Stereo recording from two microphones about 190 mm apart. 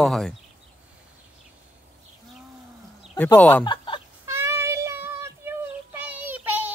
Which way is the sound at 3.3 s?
10° left (ahead or behind).